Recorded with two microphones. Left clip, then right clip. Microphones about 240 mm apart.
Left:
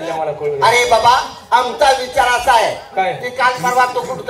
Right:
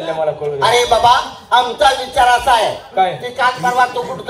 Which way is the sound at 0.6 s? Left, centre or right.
Right.